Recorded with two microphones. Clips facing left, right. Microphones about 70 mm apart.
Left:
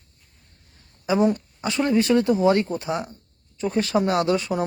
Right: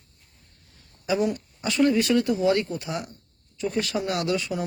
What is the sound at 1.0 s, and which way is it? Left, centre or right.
A man's voice, left.